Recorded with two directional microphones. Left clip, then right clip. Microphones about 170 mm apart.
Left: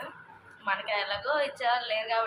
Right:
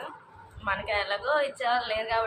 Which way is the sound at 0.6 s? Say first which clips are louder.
Right 1 dB; 5° left (ahead or behind).